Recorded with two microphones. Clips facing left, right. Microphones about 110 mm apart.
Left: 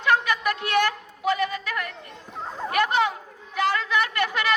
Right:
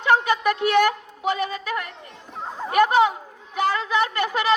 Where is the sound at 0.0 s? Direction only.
25° right (ahead or behind).